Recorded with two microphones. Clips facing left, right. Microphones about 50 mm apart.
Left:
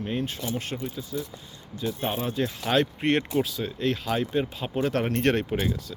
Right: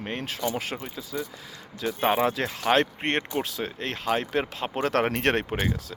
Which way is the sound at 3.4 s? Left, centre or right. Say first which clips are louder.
Left 3 dB; right.